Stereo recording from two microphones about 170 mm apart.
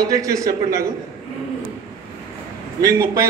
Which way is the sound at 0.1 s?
20° right (ahead or behind).